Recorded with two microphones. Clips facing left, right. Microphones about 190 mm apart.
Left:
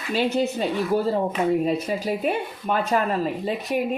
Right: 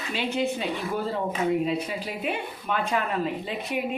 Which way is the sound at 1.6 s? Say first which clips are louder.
Left 4 dB; 40° left (ahead or behind).